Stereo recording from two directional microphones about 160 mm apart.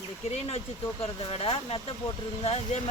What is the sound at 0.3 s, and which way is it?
Speech, 40° left (ahead or behind).